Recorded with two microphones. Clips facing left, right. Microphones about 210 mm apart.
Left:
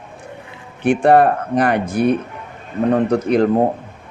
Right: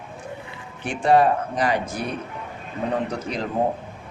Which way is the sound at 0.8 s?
60° left (ahead or behind).